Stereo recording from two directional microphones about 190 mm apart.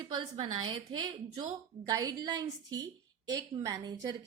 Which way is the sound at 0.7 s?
25° right (ahead or behind).